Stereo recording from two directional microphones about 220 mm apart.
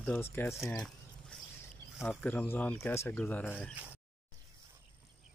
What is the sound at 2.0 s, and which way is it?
Speech, 5° left (ahead or behind).